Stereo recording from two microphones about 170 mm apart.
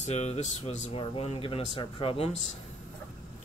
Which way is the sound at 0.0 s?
40° left (ahead or behind).